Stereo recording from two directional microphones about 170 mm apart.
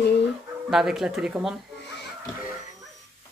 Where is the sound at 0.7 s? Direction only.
5° right (ahead or behind).